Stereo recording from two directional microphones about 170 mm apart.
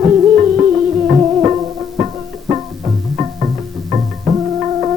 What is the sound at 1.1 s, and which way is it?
Music, 20° right (ahead or behind).